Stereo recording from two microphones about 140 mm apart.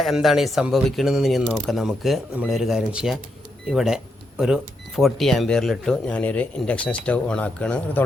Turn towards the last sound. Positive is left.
turn(degrees=10)  # may be behind; listen again after turning